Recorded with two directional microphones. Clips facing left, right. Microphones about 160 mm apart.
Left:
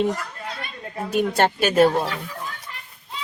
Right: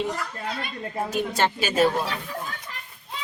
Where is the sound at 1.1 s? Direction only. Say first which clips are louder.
Left 6 dB; 60° left (ahead or behind).